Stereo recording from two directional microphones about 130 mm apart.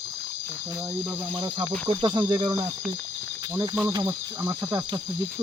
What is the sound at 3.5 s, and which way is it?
Cricket, 20° right (ahead or behind).